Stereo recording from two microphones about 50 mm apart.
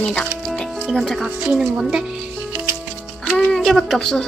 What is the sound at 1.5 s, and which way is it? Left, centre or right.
Speech, centre.